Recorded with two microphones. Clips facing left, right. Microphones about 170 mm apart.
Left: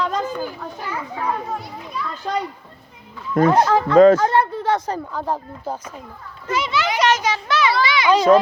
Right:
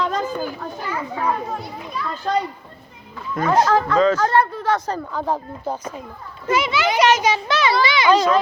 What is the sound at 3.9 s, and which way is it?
Speech, 55° left (ahead or behind).